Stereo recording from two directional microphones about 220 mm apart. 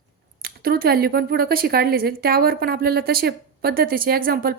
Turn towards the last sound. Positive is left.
turn(degrees=-40)  # may be behind; listen again after turning